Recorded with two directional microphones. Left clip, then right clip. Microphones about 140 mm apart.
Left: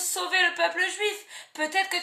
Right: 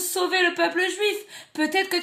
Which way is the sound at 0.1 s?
30° right (ahead or behind).